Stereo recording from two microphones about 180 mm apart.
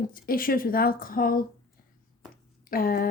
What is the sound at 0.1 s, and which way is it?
Speech, 50° left (ahead or behind).